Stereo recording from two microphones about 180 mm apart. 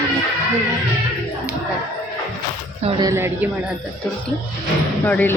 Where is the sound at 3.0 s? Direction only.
15° right (ahead or behind).